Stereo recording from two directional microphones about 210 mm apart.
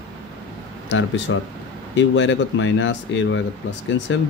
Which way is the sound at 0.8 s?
60° left (ahead or behind).